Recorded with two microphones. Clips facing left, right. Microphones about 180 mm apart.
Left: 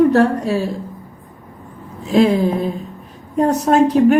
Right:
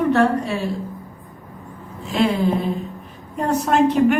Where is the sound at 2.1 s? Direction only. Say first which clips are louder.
Left 6 dB; 35° left (ahead or behind).